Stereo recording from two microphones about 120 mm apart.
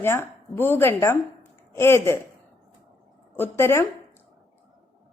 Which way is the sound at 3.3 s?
20° left (ahead or behind).